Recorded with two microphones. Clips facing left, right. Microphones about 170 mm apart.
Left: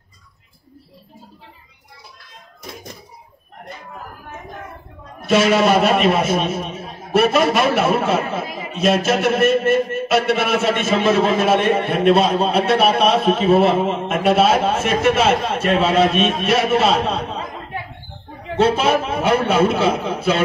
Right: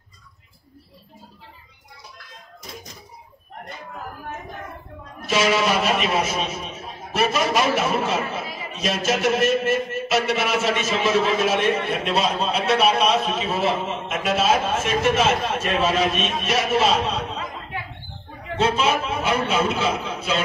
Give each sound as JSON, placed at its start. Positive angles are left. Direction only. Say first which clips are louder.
{"t": 5.2, "sound": "a man's voice", "louder": "left 6 dB", "side_deg": 55}
{"t": 18.6, "sound": "a man's voice", "louder": "left 5 dB", "side_deg": 55}